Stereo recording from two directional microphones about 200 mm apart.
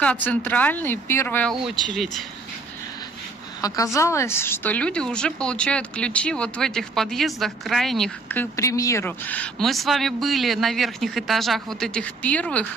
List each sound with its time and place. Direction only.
0.0 s speech: 5° left (ahead or behind)
1.5 s speech: 20° right (ahead or behind)
3.6 s a woman's voice: 15° left (ahead or behind)